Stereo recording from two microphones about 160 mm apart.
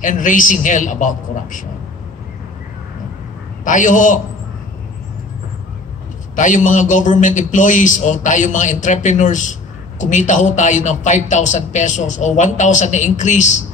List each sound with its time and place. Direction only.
0.0 s a man's voice: 55° left (ahead or behind)
3.6 s a man's voice: 55° left (ahead or behind)
6.3 s a man's voice: 55° left (ahead or behind)